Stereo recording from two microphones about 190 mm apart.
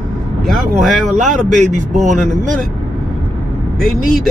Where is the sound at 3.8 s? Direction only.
Centre (ahead or behind).